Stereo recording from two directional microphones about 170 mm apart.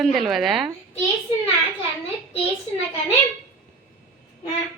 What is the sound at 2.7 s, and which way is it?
Speech, 35° left (ahead or behind).